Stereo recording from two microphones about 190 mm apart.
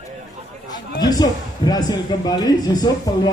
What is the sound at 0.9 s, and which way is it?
A man's voice, 20° left (ahead or behind).